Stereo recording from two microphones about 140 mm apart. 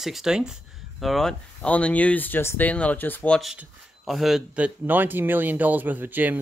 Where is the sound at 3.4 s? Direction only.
Centre (ahead or behind).